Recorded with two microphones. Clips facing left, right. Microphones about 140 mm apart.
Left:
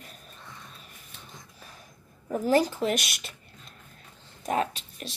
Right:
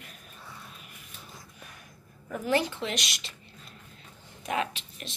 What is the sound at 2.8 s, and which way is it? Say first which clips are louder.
Speech: left 6 dB; 50° left (ahead or behind).